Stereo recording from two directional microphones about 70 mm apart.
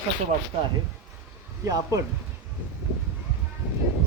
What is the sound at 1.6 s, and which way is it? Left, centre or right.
Speech, right.